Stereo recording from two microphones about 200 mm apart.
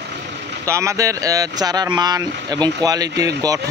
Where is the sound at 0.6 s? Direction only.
15° right (ahead or behind).